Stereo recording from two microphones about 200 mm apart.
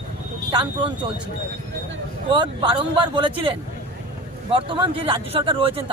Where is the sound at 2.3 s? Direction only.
25° right (ahead or behind).